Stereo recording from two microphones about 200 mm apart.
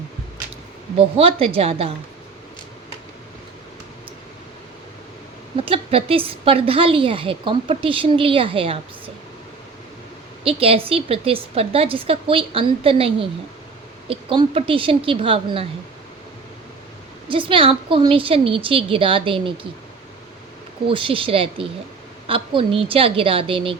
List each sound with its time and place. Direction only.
0.9 s a woman's voice: 30° right (ahead or behind)
5.5 s a woman's voice: 30° right (ahead or behind)
10.4 s a woman's voice: 30° right (ahead or behind)
17.2 s a woman's voice: 25° right (ahead or behind)
20.8 s a woman's voice: 25° right (ahead or behind)